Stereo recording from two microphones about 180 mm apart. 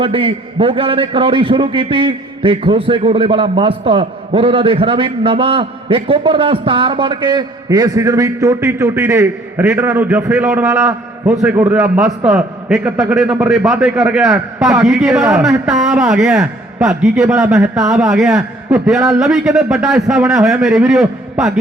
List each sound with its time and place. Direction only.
0.0 s a man's voice: 30° right (ahead or behind); by 21.6 s centre (ahead or behind)